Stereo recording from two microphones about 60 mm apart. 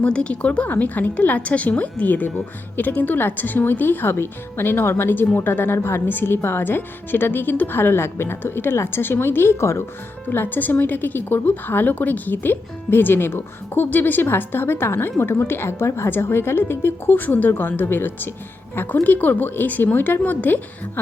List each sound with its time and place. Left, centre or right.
0.0 s a woman's voice: centre; by 9.8 s left
10.2 s speech: left